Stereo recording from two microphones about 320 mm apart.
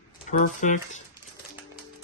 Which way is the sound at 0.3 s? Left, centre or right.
Left.